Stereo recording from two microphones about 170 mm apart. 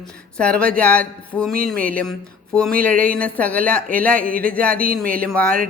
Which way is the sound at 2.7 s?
55° right (ahead or behind).